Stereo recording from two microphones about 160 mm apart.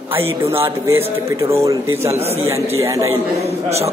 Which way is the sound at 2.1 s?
40° right (ahead or behind).